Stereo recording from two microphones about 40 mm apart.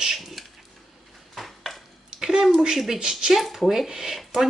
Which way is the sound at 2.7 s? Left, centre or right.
Centre.